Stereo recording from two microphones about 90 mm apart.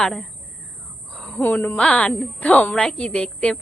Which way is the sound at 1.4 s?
20° left (ahead or behind).